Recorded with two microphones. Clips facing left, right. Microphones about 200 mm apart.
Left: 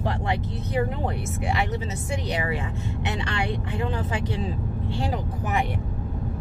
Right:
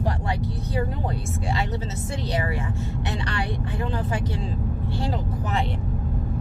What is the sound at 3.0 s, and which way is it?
Speech, 15° left (ahead or behind).